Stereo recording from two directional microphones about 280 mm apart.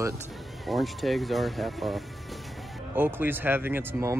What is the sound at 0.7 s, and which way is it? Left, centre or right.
Speech, centre.